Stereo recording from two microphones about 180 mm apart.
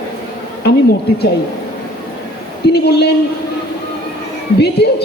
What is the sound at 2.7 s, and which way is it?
Speech, 65° left (ahead or behind).